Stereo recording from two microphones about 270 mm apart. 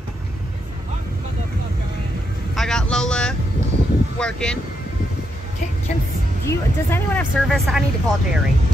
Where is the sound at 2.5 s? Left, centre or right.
Centre.